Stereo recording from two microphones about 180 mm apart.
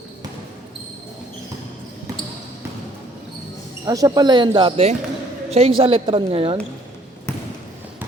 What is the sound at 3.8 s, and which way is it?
A woman's voice, 20° right (ahead or behind).